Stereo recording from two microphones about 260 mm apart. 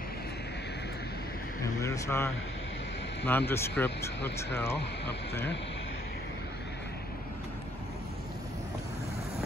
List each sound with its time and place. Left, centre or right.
1.6 s vehicle: centre
3.3 s speech: centre